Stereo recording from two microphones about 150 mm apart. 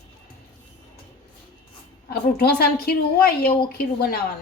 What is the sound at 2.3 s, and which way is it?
A woman's voice, 90° left.